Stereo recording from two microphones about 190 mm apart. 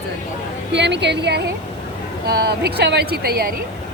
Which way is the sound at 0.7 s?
65° right (ahead or behind).